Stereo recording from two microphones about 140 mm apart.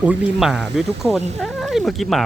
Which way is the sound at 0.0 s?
10° right (ahead or behind).